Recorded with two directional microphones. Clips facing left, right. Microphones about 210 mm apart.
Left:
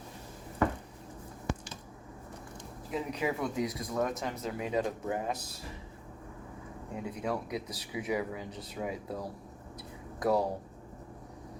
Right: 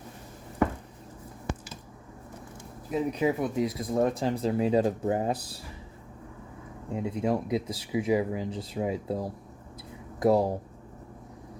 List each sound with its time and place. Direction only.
2.9 s speech: 25° right (ahead or behind)
6.9 s speech: 25° right (ahead or behind)